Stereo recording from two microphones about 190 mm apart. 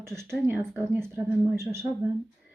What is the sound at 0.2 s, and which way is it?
A woman's voice, 10° right (ahead or behind).